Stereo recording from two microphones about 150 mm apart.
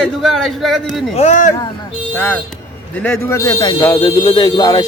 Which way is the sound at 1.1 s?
50° left (ahead or behind).